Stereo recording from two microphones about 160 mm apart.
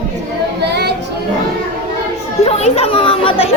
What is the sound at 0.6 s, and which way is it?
Music, 90° right.